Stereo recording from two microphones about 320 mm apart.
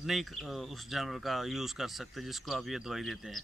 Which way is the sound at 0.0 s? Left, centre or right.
Centre.